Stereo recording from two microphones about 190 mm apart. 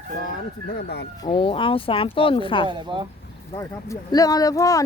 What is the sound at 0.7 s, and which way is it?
Speech, 55° left (ahead or behind).